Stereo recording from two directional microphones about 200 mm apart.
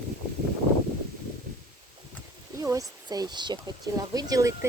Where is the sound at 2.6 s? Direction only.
15° right (ahead or behind).